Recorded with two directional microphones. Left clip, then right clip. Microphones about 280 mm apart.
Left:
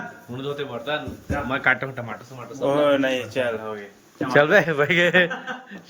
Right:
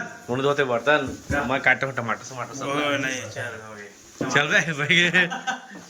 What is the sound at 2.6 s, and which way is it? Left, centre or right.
Speech, left.